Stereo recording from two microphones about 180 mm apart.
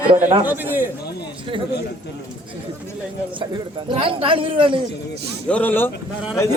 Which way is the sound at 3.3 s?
25° right (ahead or behind).